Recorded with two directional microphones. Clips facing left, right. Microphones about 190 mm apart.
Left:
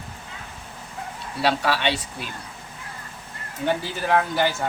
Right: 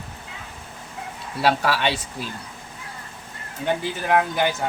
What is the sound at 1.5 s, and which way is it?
Speech, 45° right (ahead or behind).